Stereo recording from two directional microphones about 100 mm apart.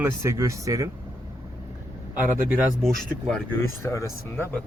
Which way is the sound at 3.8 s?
30° left (ahead or behind).